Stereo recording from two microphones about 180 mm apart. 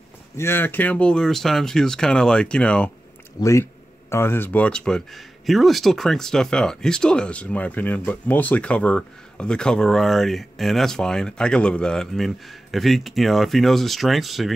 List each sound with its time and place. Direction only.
0.4 s speech: 10° left (ahead or behind)